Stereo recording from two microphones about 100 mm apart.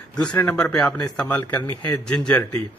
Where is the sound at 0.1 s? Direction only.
10° left (ahead or behind).